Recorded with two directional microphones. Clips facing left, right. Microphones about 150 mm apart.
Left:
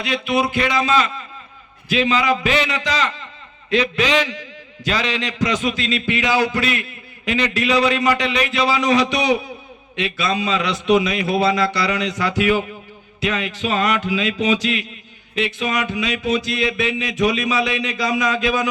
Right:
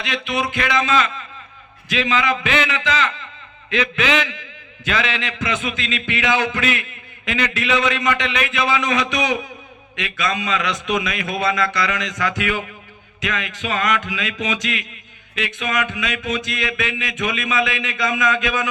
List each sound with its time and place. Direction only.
0.0 s a man's voice: 35° left (ahead or behind)